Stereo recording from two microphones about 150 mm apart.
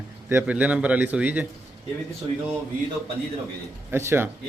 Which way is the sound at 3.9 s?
15° right (ahead or behind).